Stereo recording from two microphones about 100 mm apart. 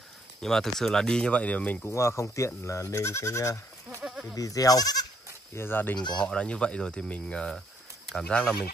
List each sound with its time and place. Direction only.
0.4 s speech: 5° left (ahead or behind)
1.9 s speech: 30° left (ahead or behind)
4.0 s bleat: 5° right (ahead or behind)
4.4 s speech: 35° left (ahead or behind)
5.5 s speech: 20° left (ahead or behind)